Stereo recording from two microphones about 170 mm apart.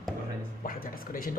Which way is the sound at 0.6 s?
55° left (ahead or behind).